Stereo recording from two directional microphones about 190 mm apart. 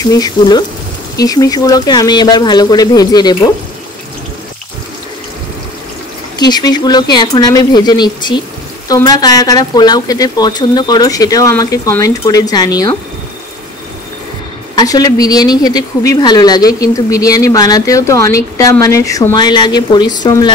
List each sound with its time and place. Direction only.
0.0 s speech: 20° left (ahead or behind)
6.3 s speech: 20° left (ahead or behind)
14.8 s speech: 20° left (ahead or behind)